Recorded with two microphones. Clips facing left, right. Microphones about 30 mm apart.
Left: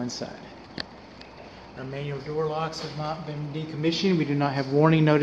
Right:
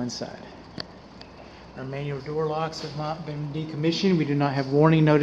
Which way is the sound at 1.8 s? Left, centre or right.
Centre.